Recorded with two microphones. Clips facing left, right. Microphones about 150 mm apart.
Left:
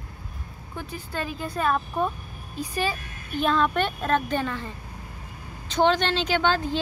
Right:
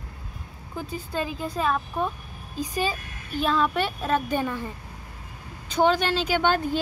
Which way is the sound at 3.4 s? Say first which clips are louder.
Left 1 dB; 5° right (ahead or behind).